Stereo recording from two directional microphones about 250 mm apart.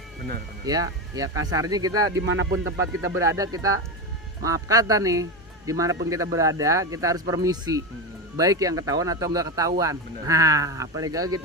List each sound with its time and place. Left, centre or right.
0.6 s speech: centre
2.3 s speech: right
3.0 s speech: centre